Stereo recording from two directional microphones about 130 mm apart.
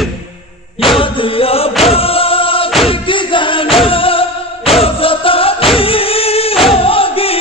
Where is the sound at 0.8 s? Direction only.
45° left (ahead or behind).